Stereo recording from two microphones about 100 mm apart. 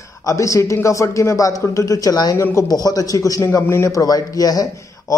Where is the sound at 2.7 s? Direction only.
40° left (ahead or behind).